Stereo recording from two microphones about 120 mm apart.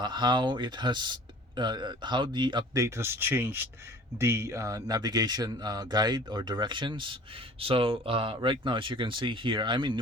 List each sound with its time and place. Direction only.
0.0 s speech: 40° right (ahead or behind)